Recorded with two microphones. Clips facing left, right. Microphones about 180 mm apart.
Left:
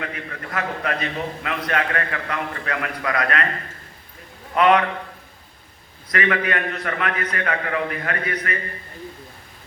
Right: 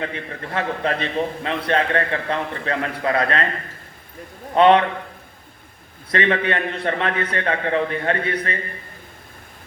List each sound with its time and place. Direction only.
0.0 s a man's voice: 30° right (ahead or behind)
4.5 s a man's voice: 30° right (ahead or behind)
6.1 s a man's voice: 30° right (ahead or behind)